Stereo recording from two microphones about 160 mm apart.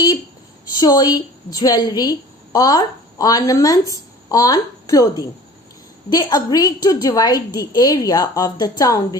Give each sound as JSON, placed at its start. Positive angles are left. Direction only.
{"t": 0.8, "sound": "a woman's voice", "side_deg": 25}